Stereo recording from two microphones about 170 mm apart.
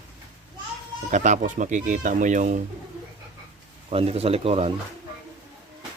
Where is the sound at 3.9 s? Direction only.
35° right (ahead or behind).